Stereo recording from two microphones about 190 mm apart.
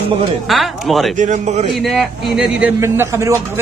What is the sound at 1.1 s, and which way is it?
Speech, 40° right (ahead or behind).